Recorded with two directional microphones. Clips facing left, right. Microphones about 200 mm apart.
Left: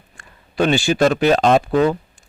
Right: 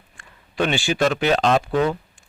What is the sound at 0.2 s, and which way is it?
Speech, 40° left (ahead or behind).